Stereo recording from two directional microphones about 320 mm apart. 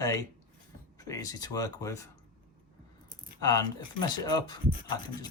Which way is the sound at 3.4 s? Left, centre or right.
Centre.